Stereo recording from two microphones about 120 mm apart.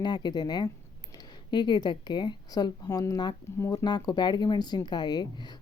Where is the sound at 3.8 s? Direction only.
35° left (ahead or behind).